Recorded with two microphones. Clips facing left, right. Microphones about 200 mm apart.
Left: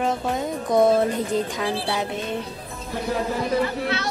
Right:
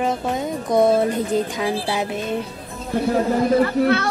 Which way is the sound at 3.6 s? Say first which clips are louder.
Right 7 dB; 50° right (ahead or behind).